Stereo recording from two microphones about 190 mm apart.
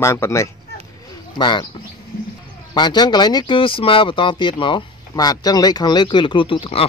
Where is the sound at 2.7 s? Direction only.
20° left (ahead or behind).